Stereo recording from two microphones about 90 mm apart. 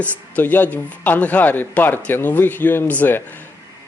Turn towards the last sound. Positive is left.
turn(degrees=20)  # may be behind; listen again after turning